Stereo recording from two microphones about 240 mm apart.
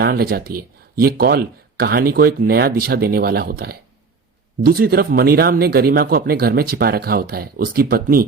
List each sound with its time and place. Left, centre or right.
0.0 s speech: right